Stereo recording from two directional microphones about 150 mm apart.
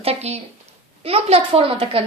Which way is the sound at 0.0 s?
45° right (ahead or behind).